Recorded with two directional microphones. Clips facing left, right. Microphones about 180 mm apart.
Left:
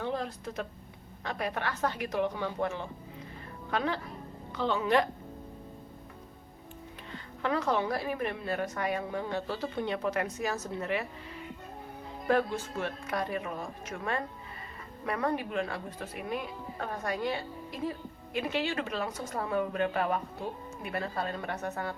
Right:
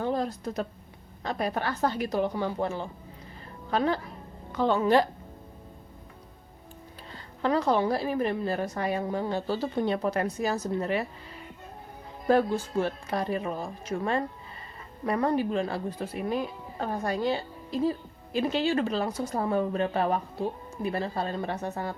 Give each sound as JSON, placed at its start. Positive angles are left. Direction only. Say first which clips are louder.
{"t": 0.0, "sound": "a woman's voice", "louder": "right 5 dB", "side_deg": -40}
{"t": 7.1, "sound": "a woman's voice", "louder": "right 5 dB", "side_deg": -35}
{"t": 12.3, "sound": "a woman's voice", "louder": "right 5 dB", "side_deg": -35}